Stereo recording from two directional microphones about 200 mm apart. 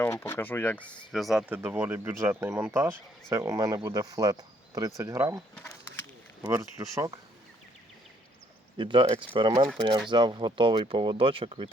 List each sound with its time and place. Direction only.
0.0 s speech: 10° left (ahead or behind); by 5.4 s 15° right (ahead or behind)
6.4 s speech: 15° right (ahead or behind)
8.8 s speech: 25° right (ahead or behind)